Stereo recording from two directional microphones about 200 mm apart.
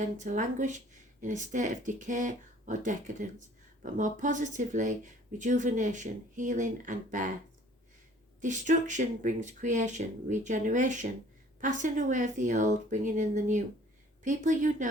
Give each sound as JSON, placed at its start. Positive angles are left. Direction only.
{"t": 0.0, "sound": "speech", "side_deg": -40}
{"t": 8.4, "sound": "speech", "side_deg": -40}